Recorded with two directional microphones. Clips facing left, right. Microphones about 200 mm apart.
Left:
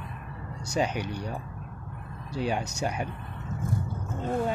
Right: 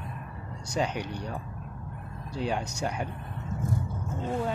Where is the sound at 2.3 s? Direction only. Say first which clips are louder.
Left 1 dB; 10° left (ahead or behind).